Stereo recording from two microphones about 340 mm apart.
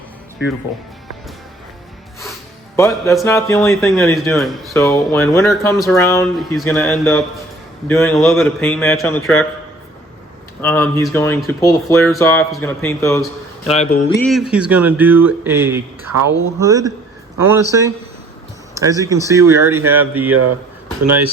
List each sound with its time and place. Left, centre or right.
2.7 s a man's voice: centre
10.6 s speech: centre
13.7 s mantra: centre
14.2 s a man's voice: centre
20.3 s speech: right